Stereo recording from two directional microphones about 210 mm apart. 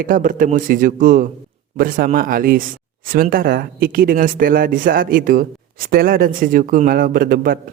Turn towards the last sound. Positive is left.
turn(degrees=-45)  # may be behind; listen again after turning